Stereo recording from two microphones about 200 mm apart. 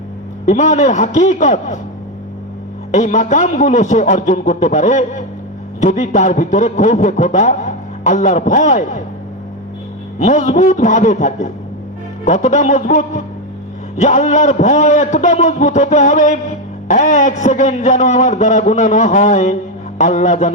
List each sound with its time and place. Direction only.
0.4 s a man's voice: 35° left (ahead or behind)
2.9 s a man's voice: 35° left (ahead or behind)
10.2 s a man's voice: 40° left (ahead or behind)